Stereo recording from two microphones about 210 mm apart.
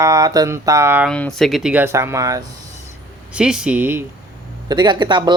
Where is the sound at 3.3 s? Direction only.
5° right (ahead or behind).